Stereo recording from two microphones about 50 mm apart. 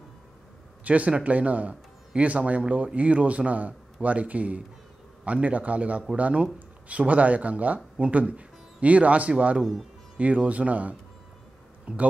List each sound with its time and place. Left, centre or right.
0.8 s speech: right
9.6 s speech: centre
10.1 s speech: right